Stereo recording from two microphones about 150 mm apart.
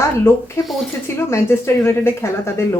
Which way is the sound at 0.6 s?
Centre (ahead or behind).